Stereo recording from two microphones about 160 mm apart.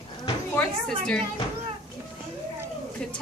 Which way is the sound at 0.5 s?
5° left (ahead or behind).